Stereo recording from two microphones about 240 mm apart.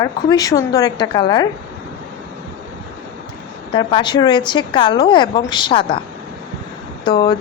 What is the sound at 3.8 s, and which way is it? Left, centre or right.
A woman's voice, centre.